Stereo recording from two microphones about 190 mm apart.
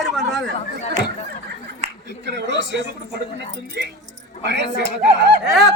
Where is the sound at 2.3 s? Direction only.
65° right (ahead or behind).